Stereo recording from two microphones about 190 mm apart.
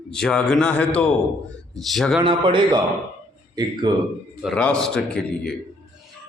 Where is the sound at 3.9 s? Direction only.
20° right (ahead or behind).